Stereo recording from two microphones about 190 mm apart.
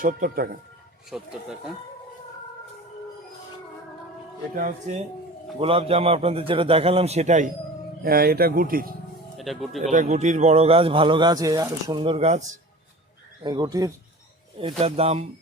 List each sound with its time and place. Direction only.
0.0 s speech: 45° right (ahead or behind)
1.1 s speech: 5° right (ahead or behind)
4.5 s speech: 40° right (ahead or behind)
5.5 s speech: 30° right (ahead or behind)
8.0 s speech: 55° right (ahead or behind)
9.4 s speech: centre (ahead or behind)
9.8 s speech: 40° right (ahead or behind)
13.4 s speech: 20° right (ahead or behind)
14.6 s speech: 30° right (ahead or behind)